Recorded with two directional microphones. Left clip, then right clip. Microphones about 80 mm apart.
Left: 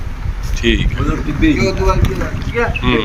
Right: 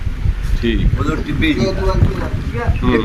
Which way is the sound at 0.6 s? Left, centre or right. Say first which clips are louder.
Left 4 dB; right.